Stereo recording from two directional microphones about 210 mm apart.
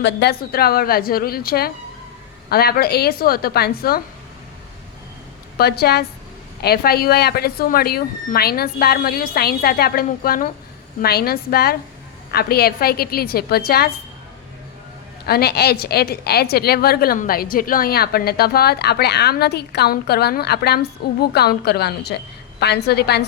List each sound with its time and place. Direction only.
0.0 s a woman's voice: 50° left (ahead or behind)
5.5 s a woman's voice: 50° left (ahead or behind)
15.3 s a woman's voice: 50° left (ahead or behind)